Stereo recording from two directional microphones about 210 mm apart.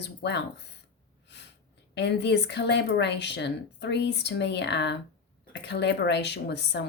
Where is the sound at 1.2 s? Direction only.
55° left (ahead or behind).